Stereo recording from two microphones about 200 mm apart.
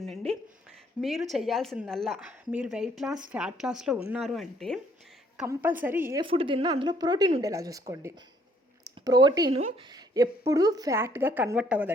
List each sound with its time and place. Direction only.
0.0 s a sound: centre (ahead or behind)
1.0 s a woman's voice: centre (ahead or behind)
6.2 s a woman's voice: 25° right (ahead or behind)
9.6 s speech: 35° right (ahead or behind)
9.9 s a woman's voice: 15° right (ahead or behind)